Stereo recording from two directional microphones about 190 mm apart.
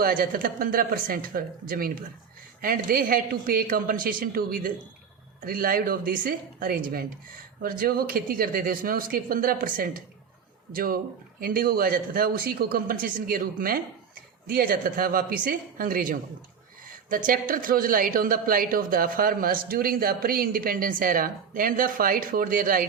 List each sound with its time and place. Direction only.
0.0 s a woman's voice: 50° right (ahead or behind)